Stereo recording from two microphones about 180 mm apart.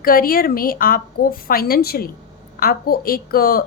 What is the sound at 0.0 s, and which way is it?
A woman's voice, 55° left (ahead or behind).